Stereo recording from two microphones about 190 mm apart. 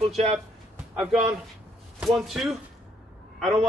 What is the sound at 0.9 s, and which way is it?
A man's voice, centre (ahead or behind).